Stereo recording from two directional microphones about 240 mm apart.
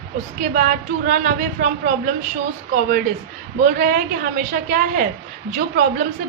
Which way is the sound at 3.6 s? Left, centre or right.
Right.